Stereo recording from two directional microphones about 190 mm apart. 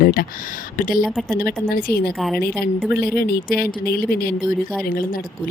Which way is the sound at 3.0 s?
55° left (ahead or behind).